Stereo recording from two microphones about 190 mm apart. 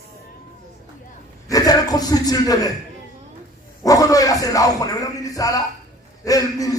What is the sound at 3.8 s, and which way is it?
Speech, 20° left (ahead or behind).